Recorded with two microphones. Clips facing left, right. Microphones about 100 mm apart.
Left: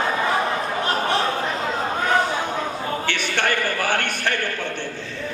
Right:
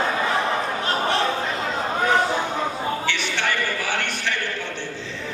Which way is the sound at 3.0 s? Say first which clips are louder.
Left 2 dB; 50° left (ahead or behind).